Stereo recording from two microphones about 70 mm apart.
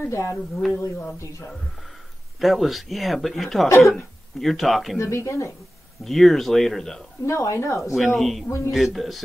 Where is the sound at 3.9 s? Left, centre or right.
Centre.